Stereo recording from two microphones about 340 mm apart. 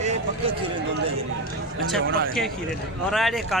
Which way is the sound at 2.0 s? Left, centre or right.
Right.